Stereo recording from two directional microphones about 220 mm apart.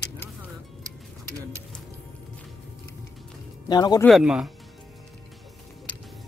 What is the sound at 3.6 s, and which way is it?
Speech, 20° left (ahead or behind).